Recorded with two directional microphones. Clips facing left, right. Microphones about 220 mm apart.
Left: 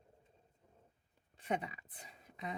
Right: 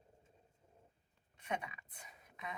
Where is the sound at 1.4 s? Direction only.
30° left (ahead or behind).